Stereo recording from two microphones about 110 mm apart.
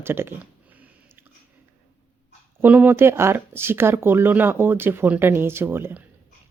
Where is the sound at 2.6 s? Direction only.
15° right (ahead or behind).